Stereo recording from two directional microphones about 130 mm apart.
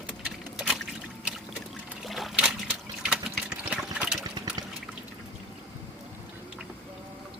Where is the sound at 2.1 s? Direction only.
Centre (ahead or behind).